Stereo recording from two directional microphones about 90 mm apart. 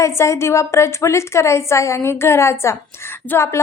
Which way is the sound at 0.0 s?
35° left (ahead or behind).